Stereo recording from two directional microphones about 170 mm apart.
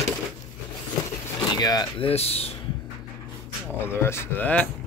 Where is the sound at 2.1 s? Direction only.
35° left (ahead or behind).